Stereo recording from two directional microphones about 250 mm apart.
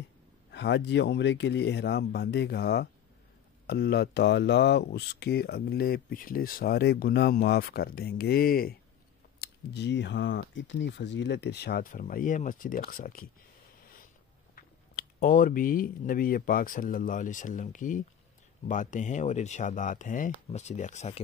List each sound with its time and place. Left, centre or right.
0.5 s speech: left
14.5 s speech: left